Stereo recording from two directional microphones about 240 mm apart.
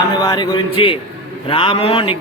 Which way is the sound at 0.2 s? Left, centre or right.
Centre.